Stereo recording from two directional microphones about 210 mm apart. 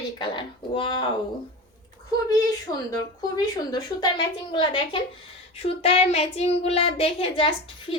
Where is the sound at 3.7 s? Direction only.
20° left (ahead or behind).